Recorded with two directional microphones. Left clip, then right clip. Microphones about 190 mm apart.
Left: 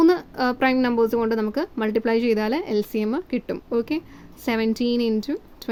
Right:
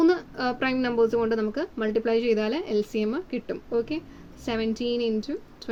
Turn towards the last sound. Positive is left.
turn(degrees=40)  # may be behind; listen again after turning